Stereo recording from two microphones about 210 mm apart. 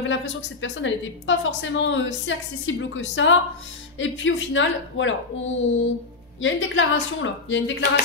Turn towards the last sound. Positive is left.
turn(degrees=60)  # may be behind; listen again after turning